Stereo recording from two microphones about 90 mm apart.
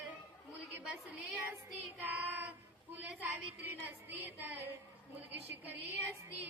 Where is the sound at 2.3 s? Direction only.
20° right (ahead or behind).